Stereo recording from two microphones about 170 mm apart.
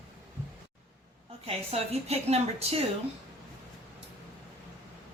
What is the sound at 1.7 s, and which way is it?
A woman's voice, 40° right (ahead or behind).